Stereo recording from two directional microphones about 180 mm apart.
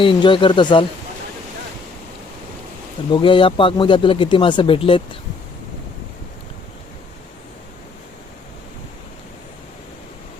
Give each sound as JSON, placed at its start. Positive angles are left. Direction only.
{"t": 0.0, "sound": "speech", "side_deg": 25}
{"t": 3.1, "sound": "speech", "side_deg": 25}